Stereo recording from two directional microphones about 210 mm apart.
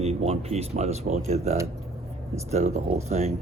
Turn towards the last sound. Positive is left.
turn(degrees=-30)  # may be behind; listen again after turning